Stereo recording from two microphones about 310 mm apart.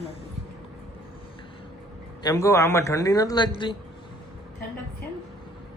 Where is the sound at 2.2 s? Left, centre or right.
Centre.